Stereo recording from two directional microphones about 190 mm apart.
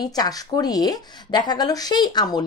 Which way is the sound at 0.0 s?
20° left (ahead or behind).